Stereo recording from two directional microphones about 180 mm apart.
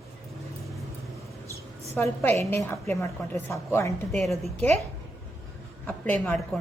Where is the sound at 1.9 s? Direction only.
15° left (ahead or behind).